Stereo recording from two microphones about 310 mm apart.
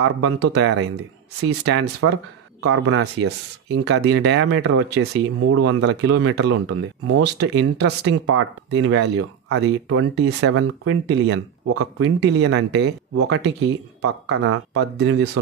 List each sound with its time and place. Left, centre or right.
0.0 s speech: right